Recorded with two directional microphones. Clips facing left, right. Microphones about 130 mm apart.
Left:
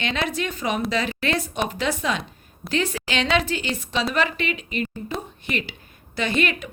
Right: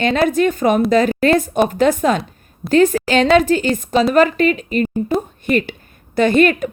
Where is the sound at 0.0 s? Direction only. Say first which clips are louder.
Right 11 dB; 45° right (ahead or behind).